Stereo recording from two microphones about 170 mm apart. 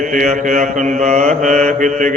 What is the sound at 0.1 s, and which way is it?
Mantra, 45° right (ahead or behind).